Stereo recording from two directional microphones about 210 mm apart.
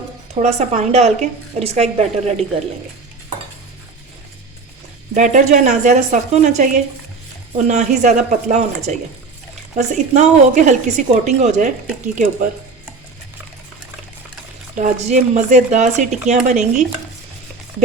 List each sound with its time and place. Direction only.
0.3 s speech: 35° right (ahead or behind)
5.1 s speech: 35° right (ahead or behind)
14.8 s speech: 35° right (ahead or behind)